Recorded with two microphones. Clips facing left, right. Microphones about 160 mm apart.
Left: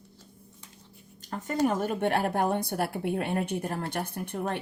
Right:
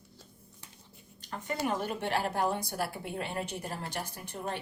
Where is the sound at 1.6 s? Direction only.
45° left (ahead or behind).